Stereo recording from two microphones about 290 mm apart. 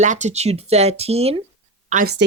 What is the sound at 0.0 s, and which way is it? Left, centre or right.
Speech, right.